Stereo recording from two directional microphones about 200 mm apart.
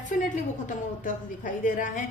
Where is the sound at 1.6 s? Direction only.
40° left (ahead or behind).